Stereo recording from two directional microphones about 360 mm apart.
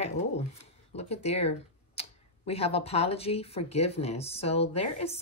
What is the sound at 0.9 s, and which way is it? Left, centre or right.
Speech, centre.